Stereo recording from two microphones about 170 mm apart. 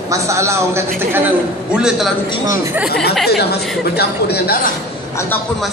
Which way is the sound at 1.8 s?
5° right (ahead or behind).